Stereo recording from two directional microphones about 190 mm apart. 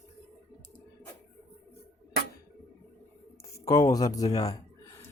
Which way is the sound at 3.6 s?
20° left (ahead or behind).